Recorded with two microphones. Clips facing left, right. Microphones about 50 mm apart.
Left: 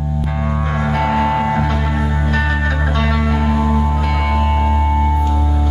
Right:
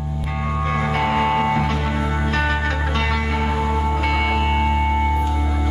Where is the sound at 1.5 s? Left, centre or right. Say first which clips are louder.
Left 3 dB; left.